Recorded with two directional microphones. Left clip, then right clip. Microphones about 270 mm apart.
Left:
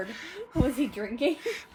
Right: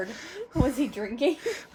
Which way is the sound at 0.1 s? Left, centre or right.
Right.